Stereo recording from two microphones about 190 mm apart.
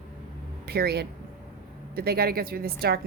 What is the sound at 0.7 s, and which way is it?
A woman's voice, 55° right (ahead or behind).